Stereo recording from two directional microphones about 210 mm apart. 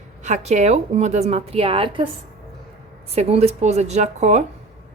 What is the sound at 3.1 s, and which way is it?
A woman's voice, 30° right (ahead or behind).